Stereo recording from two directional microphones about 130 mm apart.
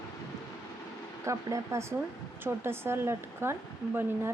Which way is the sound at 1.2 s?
20° right (ahead or behind).